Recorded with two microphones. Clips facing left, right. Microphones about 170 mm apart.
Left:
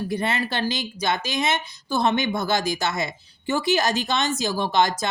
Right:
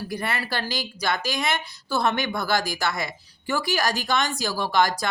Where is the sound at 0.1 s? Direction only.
25° left (ahead or behind).